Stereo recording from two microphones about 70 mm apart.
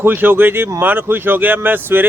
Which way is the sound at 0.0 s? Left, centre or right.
Right.